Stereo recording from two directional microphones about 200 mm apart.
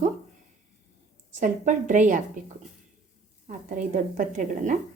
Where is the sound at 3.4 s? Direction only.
40° right (ahead or behind).